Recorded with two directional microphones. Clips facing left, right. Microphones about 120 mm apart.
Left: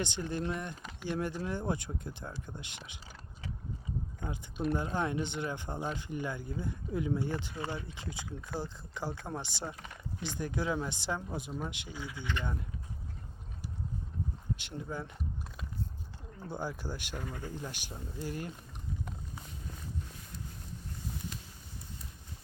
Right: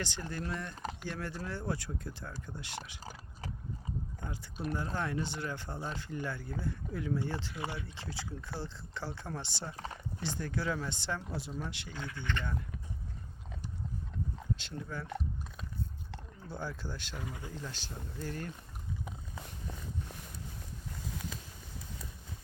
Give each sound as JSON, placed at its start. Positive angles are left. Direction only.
{"t": 0.0, "sound": "speech", "side_deg": 20}
{"t": 3.0, "sound": "a sound", "side_deg": -40}
{"t": 4.7, "sound": "speech", "side_deg": 20}
{"t": 9.7, "sound": "speech", "side_deg": -35}
{"t": 10.2, "sound": "speech", "side_deg": 15}
{"t": 14.5, "sound": "speech", "side_deg": 15}
{"t": 16.5, "sound": "speech", "side_deg": 15}
{"t": 17.2, "sound": "speech", "side_deg": -5}
{"t": 17.5, "sound": "speech", "side_deg": 15}